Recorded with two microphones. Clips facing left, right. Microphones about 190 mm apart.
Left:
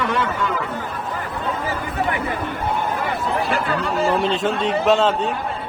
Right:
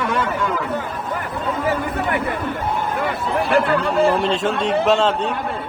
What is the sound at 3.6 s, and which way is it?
Speech, 55° right (ahead or behind).